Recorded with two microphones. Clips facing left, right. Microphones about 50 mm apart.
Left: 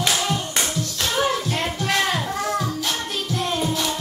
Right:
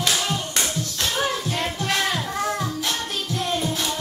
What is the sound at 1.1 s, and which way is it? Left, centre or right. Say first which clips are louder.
Music: left 3 dB; centre.